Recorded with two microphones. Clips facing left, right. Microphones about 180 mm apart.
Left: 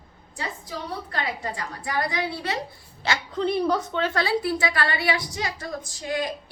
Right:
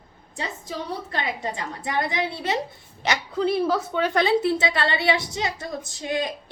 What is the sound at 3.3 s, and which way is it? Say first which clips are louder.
A woman's voice: right 1 dB; 5° right (ahead or behind).